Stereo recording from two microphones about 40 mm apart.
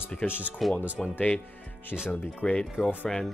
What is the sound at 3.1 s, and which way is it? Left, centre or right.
Speech, centre.